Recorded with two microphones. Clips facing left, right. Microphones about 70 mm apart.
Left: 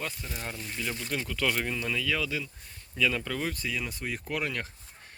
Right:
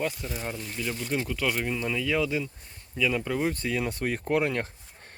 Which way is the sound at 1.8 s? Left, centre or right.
Right.